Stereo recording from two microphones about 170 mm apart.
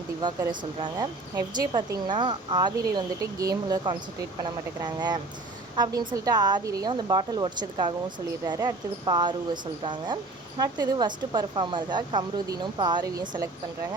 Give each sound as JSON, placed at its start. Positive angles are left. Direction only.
{"t": 0.2, "sound": "speech", "side_deg": -25}